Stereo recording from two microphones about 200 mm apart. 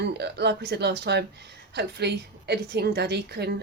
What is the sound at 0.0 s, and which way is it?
A woman's voice, 55° right (ahead or behind).